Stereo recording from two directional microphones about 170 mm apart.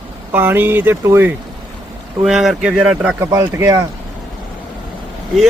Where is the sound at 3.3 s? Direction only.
20° right (ahead or behind).